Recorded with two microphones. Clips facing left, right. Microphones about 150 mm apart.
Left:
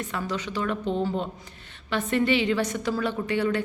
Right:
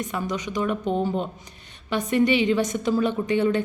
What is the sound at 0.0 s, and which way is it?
A woman's voice, 15° right (ahead or behind).